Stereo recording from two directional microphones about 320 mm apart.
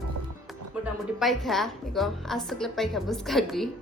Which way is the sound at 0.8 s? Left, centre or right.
Centre.